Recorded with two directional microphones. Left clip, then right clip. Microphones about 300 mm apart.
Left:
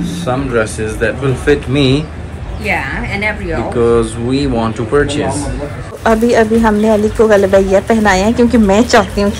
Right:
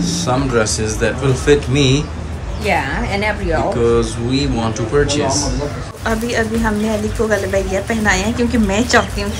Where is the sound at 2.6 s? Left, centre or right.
Right.